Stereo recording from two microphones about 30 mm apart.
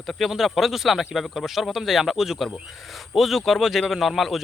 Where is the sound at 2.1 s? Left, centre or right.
Centre.